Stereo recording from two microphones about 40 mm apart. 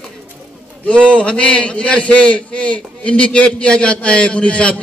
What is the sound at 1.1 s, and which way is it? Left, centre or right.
A man's voice, left.